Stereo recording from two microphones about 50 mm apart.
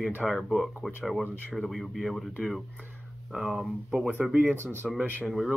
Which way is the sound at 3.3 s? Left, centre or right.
Centre.